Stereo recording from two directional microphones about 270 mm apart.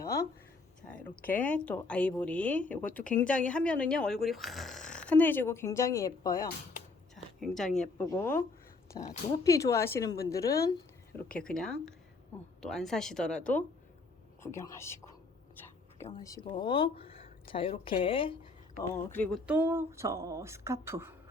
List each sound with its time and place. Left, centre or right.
0.0 s a sound: centre
0.8 s speech: centre
1.1 s speech: left
1.5 s speech: centre
7.3 s a woman's voice: centre
19.1 s speech: centre